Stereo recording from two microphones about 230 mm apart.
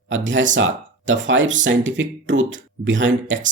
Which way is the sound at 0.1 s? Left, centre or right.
Right.